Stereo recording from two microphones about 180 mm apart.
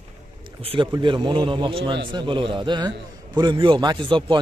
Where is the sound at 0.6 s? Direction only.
30° right (ahead or behind).